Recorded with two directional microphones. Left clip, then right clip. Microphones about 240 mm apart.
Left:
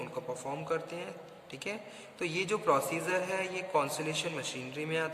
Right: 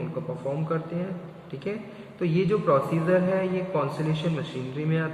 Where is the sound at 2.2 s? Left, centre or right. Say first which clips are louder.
Right 7 dB; left.